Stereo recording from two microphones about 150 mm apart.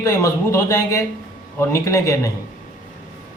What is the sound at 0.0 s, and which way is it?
A man's voice, 20° left (ahead or behind).